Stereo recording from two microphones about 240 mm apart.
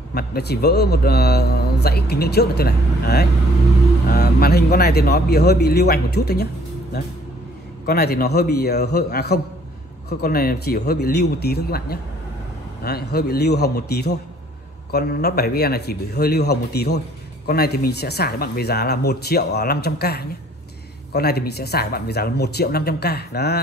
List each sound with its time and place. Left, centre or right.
0.1 s a man's voice: left